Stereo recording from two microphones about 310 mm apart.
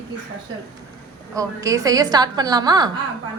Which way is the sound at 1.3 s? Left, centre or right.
Centre.